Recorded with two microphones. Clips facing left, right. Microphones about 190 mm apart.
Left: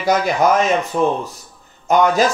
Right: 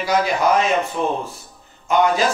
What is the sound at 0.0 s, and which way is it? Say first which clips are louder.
Speech: left 3 dB; 45° left (ahead or behind).